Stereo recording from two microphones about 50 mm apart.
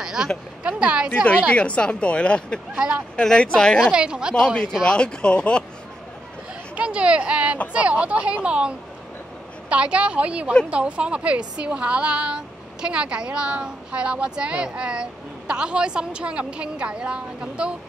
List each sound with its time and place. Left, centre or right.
0.0 s a sound: centre
0.7 s a woman's voice: right
1.5 s speech: left
2.7 s a woman's voice: centre
3.2 s speech: centre
3.9 s a woman's voice: centre
4.8 s speech: centre
6.8 s a woman's voice: right